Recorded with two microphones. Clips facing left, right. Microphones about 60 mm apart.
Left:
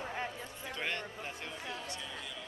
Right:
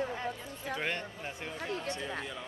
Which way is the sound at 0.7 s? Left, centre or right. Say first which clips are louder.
Right 4 dB; centre.